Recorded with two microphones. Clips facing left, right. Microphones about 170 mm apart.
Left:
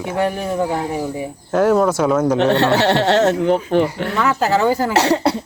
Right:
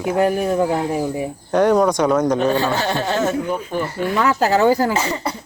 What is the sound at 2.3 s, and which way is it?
Speech, 70° left (ahead or behind).